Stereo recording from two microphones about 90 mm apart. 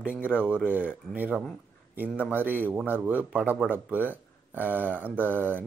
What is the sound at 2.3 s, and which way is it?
Speech, 20° right (ahead or behind).